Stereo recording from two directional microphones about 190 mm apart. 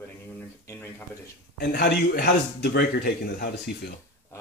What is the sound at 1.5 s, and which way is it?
Speech, 55° left (ahead or behind).